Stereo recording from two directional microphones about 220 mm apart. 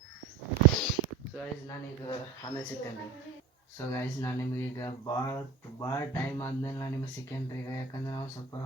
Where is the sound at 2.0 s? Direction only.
20° left (ahead or behind).